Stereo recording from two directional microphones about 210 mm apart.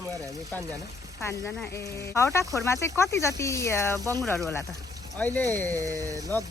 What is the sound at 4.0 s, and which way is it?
Speech, 15° right (ahead or behind).